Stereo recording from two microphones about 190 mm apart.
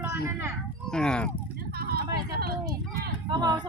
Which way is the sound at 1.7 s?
55° right (ahead or behind).